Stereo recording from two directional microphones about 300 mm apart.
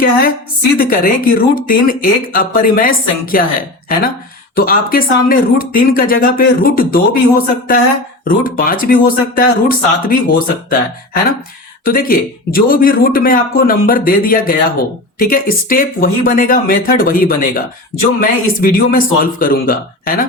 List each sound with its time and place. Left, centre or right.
0.8 s a man's voice: left
4.5 s a man's voice: left